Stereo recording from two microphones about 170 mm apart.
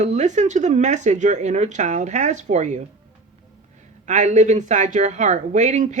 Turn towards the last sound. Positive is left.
turn(degrees=-45)  # may be behind; listen again after turning